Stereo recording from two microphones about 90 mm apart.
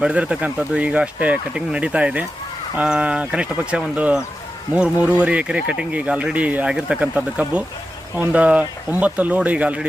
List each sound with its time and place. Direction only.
0.0 s speech: 10° right (ahead or behind)